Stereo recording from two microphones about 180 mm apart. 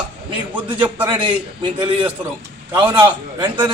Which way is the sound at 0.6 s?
25° right (ahead or behind).